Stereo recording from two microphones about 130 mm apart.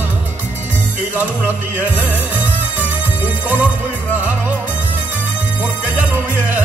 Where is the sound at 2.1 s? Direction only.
10° right (ahead or behind).